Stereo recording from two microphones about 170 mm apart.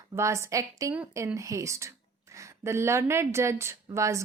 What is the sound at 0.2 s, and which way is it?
A woman's voice, 15° right (ahead or behind).